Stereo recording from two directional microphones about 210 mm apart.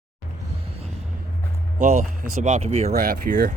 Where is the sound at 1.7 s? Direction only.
40° right (ahead or behind).